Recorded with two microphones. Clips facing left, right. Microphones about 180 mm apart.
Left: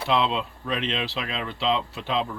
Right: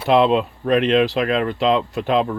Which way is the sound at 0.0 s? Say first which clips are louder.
Right 9 dB; 55° right (ahead or behind).